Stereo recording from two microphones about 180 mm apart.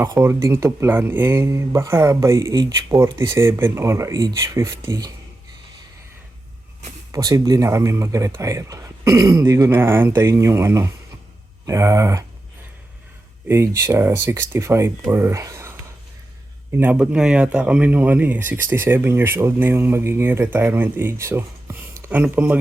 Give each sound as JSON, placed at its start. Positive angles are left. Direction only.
{"t": 0.0, "sound": "speech", "side_deg": -15}
{"t": 7.1, "sound": "speech", "side_deg": -20}
{"t": 13.5, "sound": "speech", "side_deg": -15}
{"t": 16.7, "sound": "speech", "side_deg": -10}